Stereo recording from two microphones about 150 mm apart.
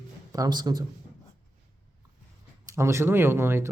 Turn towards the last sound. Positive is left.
turn(degrees=-15)  # may be behind; listen again after turning